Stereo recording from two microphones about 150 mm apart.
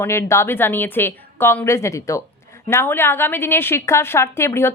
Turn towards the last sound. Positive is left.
turn(degrees=15)  # may be behind; listen again after turning